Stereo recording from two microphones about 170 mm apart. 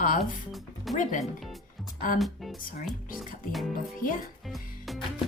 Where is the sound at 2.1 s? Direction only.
Centre (ahead or behind).